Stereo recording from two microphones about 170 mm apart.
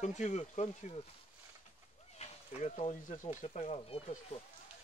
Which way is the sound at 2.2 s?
40° left (ahead or behind).